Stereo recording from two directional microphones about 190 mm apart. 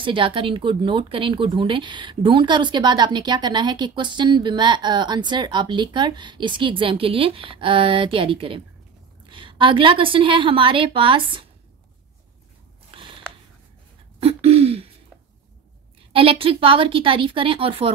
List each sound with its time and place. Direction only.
0.0 s speech: 25° right (ahead or behind)
12.9 s a sound: 25° right (ahead or behind)
14.2 s throat clearing: 30° right (ahead or behind)
16.1 s speech: 30° right (ahead or behind)